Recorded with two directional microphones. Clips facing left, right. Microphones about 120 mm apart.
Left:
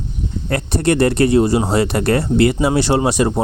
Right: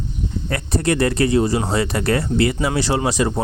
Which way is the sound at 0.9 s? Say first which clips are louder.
Left 4 dB; 30° left (ahead or behind).